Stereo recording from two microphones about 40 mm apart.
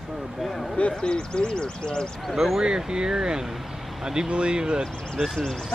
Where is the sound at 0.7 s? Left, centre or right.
Left.